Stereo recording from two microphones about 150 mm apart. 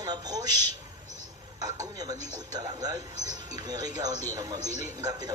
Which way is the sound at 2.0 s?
25° right (ahead or behind).